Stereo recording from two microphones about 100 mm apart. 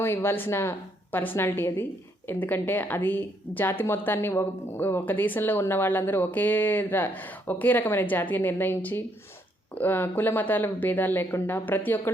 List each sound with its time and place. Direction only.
0.0 s a woman's voice: 25° left (ahead or behind)